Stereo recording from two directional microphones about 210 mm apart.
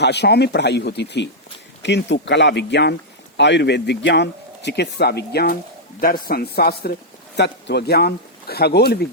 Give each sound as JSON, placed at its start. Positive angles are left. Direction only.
{"t": 0.0, "sound": "speech", "side_deg": 55}